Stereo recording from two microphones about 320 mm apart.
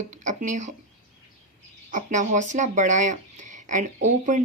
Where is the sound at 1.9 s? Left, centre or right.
Right.